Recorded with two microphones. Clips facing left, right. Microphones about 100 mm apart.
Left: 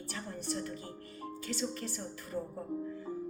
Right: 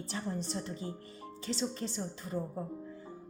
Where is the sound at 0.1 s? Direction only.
25° right (ahead or behind).